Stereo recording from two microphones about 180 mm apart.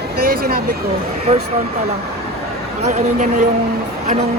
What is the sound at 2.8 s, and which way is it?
Speech, 40° right (ahead or behind).